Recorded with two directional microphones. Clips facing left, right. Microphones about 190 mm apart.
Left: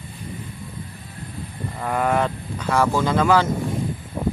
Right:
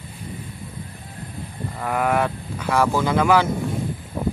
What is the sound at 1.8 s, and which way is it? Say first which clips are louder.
Speech: even; 5° right (ahead or behind).